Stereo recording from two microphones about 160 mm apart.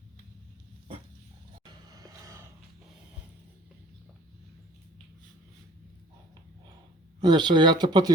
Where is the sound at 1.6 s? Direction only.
20° right (ahead or behind).